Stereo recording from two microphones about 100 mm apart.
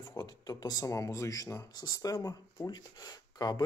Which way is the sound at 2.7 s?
45° left (ahead or behind).